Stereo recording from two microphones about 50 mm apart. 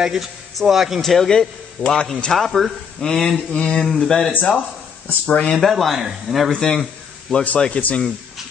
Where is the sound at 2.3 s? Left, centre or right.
Centre.